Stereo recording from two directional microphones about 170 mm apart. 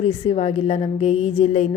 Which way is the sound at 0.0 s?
35° left (ahead or behind).